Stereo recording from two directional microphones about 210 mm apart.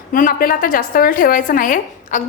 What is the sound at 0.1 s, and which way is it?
A woman's voice, 40° left (ahead or behind).